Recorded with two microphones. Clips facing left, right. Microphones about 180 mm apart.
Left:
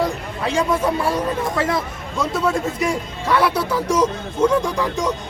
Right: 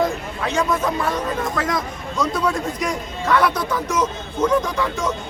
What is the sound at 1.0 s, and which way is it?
Speech, 30° left (ahead or behind).